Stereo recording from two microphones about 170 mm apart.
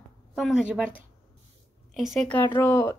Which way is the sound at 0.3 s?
5° right (ahead or behind).